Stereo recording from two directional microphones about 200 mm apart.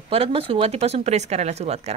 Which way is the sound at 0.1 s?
30° right (ahead or behind).